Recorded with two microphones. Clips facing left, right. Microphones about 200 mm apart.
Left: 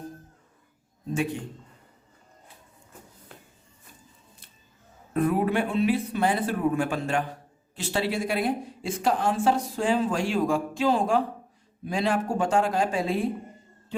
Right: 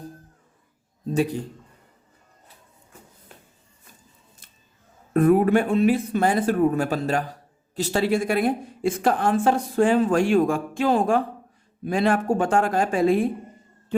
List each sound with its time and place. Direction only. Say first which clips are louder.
1.1 s a man's voice: right 5 dB; 40° right (ahead or behind)
5.1 s a woman's voice: right 7 dB; 50° right (ahead or behind)